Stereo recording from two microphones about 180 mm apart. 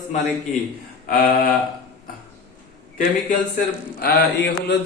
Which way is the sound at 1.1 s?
55° left (ahead or behind).